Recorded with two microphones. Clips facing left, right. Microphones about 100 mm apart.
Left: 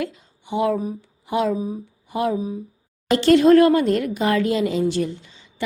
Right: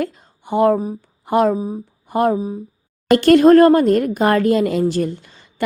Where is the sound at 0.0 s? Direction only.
45° right (ahead or behind).